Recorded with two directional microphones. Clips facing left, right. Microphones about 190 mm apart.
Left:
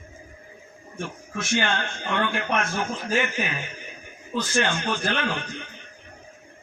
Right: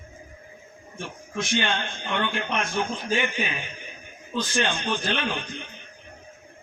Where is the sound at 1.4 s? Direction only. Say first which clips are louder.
Left 1 dB; 15° right (ahead or behind).